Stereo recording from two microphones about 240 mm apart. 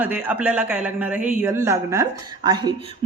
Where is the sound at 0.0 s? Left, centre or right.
Centre.